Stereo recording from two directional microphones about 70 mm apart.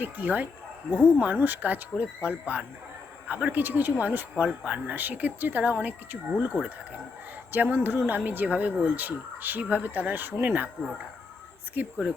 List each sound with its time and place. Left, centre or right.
0.0 s speech: right
7.5 s speech: right